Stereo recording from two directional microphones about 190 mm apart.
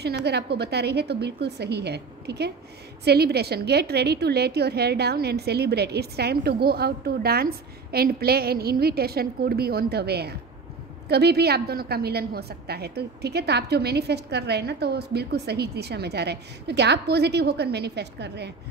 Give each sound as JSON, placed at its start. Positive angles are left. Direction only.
{"t": 0.0, "sound": "a woman's voice", "side_deg": -60}